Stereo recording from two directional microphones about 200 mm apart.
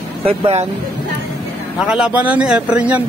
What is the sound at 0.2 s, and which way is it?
Speech, 30° right (ahead or behind).